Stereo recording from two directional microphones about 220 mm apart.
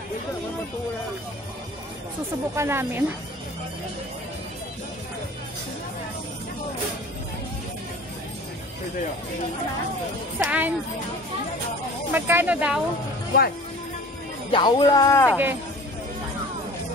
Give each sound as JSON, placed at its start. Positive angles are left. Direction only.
{"t": 2.5, "sound": "speech", "side_deg": -10}
{"t": 10.4, "sound": "speech", "side_deg": -5}
{"t": 12.1, "sound": "speech", "side_deg": -10}
{"t": 14.5, "sound": "speech", "side_deg": 20}